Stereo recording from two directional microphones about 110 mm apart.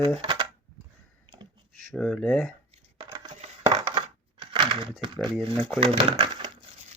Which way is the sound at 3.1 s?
40° right (ahead or behind).